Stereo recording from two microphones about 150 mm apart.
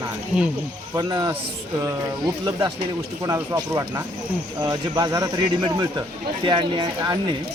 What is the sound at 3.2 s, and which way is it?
Speech, 25° right (ahead or behind).